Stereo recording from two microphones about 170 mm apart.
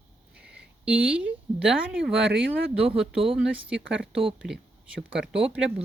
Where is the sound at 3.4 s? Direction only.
5° right (ahead or behind).